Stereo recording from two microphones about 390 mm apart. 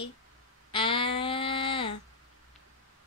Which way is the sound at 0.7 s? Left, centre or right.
Centre.